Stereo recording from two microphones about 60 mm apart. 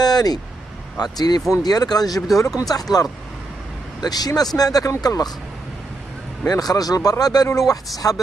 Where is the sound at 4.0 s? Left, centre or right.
Left.